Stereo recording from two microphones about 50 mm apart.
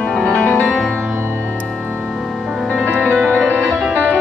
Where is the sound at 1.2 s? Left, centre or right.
Right.